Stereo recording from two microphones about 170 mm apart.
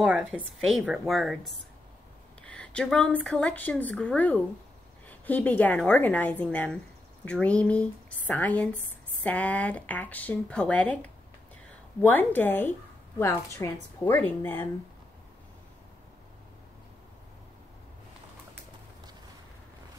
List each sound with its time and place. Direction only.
0.0 s a woman's voice: 5° right (ahead or behind); by 14.6 s 10° left (ahead or behind)